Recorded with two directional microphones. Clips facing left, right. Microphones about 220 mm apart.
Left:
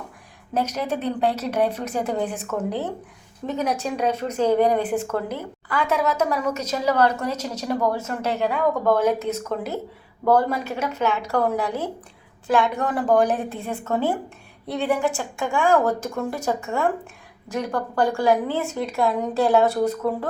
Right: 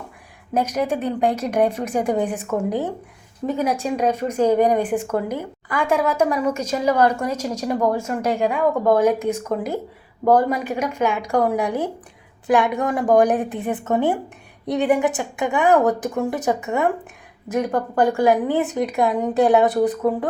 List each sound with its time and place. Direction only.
0.5 s a woman's voice: 10° right (ahead or behind)